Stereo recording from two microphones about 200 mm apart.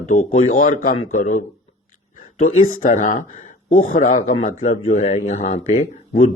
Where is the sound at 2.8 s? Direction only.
40° left (ahead or behind).